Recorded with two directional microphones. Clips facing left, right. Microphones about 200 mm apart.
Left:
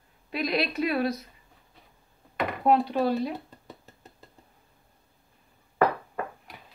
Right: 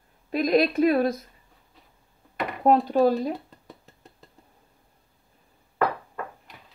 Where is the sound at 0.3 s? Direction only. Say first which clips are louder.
Right 7 dB; 45° right (ahead or behind).